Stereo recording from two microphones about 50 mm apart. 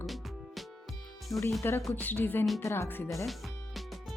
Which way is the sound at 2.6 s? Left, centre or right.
Left.